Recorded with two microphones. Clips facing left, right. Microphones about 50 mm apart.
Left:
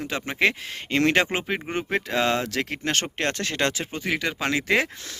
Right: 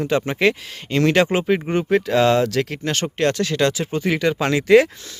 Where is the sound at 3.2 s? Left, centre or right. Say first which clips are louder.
Right 6 dB; left.